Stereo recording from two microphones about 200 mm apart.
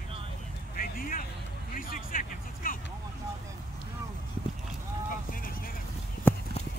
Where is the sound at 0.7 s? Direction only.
45° left (ahead or behind).